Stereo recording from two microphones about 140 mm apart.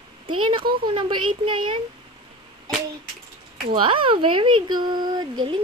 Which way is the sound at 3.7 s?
40° right (ahead or behind).